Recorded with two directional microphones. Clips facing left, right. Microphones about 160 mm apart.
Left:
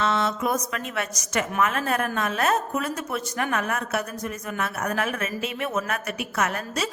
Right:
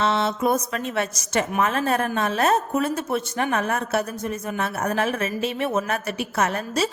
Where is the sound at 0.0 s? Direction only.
25° right (ahead or behind).